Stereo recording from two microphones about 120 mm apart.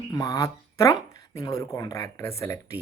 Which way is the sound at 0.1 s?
30° left (ahead or behind).